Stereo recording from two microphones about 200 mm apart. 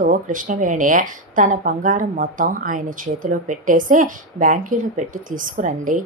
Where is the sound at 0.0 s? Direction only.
40° right (ahead or behind).